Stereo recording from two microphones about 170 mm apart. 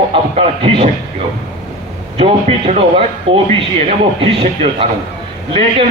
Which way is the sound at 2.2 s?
35° right (ahead or behind).